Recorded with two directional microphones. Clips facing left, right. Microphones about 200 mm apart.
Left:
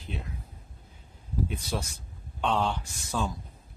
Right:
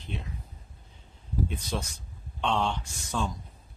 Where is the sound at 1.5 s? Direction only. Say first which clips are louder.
Even; 10° left (ahead or behind).